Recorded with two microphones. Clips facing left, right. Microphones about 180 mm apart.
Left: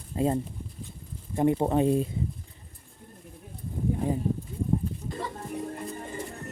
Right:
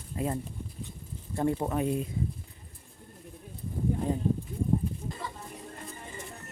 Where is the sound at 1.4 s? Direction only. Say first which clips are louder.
Left 5 dB; 20° left (ahead or behind).